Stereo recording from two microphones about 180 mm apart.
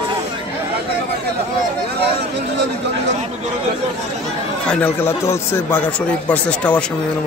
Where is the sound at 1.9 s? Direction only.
65° right (ahead or behind).